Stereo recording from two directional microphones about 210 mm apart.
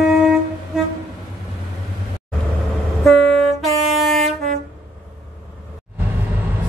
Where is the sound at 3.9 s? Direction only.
Centre (ahead or behind).